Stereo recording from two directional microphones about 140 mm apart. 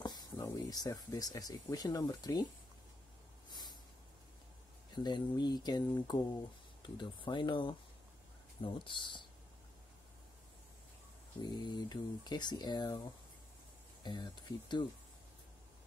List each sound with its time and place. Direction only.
0.0 s speech: 30° left (ahead or behind)
3.4 s a sound: 30° left (ahead or behind)
4.9 s speech: 30° left (ahead or behind)
11.4 s speech: 30° left (ahead or behind)
14.0 s speech: 30° left (ahead or behind)